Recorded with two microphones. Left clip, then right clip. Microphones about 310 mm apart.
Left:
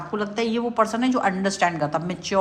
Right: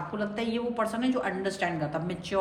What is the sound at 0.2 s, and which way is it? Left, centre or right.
A woman's voice, centre.